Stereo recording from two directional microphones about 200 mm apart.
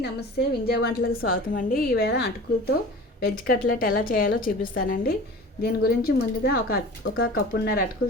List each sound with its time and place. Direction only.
0.0 s a woman's voice: 55° left (ahead or behind)